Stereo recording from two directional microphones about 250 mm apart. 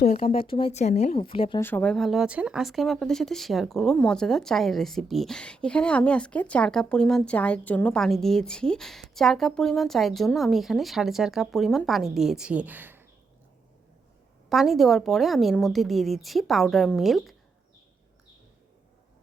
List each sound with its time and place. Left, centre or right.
0.0 s speech: left
1.6 s speech: centre
14.5 s speech: centre